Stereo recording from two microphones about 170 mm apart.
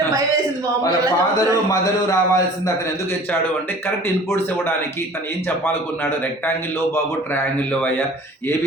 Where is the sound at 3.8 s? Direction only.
15° left (ahead or behind).